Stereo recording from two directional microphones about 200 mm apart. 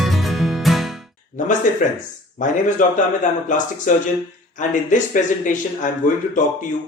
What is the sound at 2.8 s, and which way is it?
Speech, 40° left (ahead or behind).